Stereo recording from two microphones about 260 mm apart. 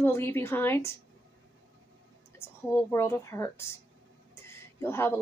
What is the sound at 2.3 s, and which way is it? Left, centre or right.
Speech, centre.